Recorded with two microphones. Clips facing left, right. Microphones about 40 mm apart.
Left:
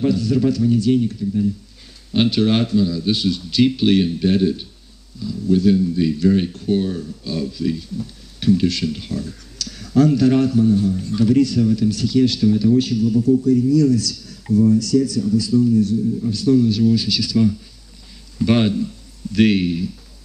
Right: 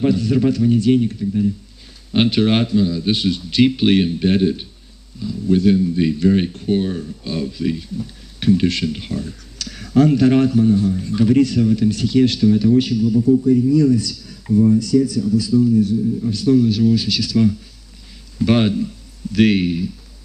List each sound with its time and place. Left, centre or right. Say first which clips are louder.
0.0 s speech: right 1 dB; right